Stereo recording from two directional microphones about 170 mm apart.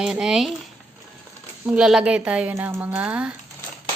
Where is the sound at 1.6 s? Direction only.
5° right (ahead or behind).